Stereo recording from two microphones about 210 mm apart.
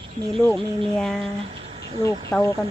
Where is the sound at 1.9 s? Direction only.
20° right (ahead or behind).